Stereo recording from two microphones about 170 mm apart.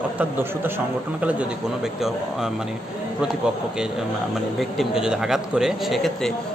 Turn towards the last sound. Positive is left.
turn(degrees=0)  # may be behind; listen again after turning